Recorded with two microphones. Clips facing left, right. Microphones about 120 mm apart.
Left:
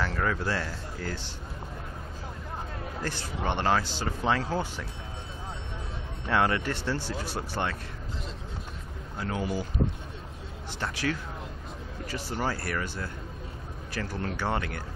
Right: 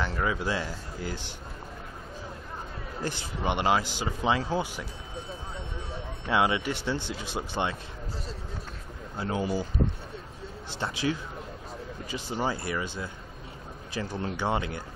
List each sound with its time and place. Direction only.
0.1 s speech: 10° right (ahead or behind)
3.0 s speech: 15° right (ahead or behind)
6.2 s speech: 10° right (ahead or behind)
7.2 s speech: 20° right (ahead or behind)
9.2 s speech: 25° right (ahead or behind)
10.7 s speech: 25° right (ahead or behind)